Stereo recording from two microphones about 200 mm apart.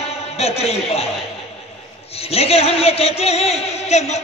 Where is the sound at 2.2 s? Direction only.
30° left (ahead or behind).